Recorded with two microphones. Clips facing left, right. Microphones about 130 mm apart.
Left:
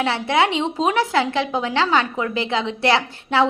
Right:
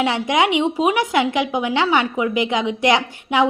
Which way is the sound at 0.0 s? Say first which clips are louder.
Right 1 dB; 15° right (ahead or behind).